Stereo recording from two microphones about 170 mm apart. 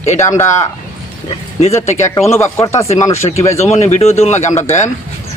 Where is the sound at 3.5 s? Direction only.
40° left (ahead or behind).